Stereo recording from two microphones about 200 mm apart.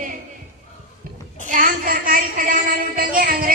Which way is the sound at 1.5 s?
40° right (ahead or behind).